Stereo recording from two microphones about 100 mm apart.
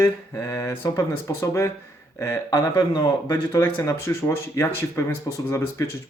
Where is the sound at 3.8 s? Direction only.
30° left (ahead or behind).